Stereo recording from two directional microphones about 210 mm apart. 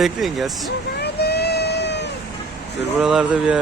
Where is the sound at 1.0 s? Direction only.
50° left (ahead or behind).